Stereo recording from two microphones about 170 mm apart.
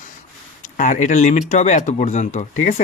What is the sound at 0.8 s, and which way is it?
Speech, 45° left (ahead or behind).